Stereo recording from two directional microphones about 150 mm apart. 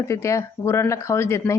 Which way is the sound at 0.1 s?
20° left (ahead or behind).